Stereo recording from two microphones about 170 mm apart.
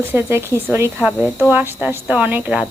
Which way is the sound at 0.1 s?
15° right (ahead or behind).